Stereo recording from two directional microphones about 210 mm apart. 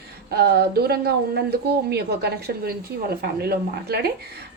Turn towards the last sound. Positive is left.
turn(degrees=-50)  # may be behind; listen again after turning